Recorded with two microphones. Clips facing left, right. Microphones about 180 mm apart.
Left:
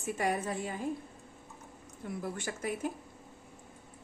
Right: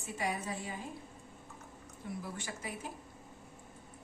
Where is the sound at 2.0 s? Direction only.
55° left (ahead or behind).